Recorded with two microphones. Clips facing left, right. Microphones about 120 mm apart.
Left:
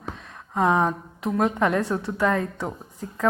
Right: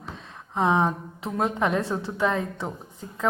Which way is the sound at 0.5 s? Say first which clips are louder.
Left 1 dB; 25° right (ahead or behind).